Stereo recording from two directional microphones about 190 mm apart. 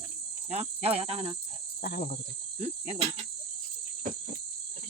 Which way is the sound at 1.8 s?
55° left (ahead or behind).